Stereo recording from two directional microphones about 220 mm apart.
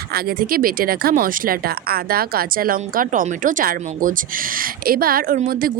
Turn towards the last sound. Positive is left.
turn(degrees=-40)  # may be behind; listen again after turning